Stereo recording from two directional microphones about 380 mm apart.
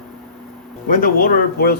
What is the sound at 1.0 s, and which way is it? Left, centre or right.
Speech, left.